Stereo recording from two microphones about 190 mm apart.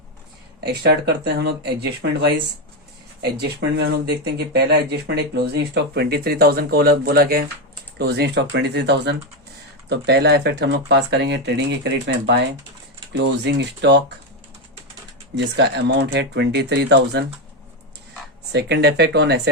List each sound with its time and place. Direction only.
0.6 s speech: 60° right (ahead or behind)
15.4 s speech: 65° right (ahead or behind)
18.5 s speech: 60° right (ahead or behind)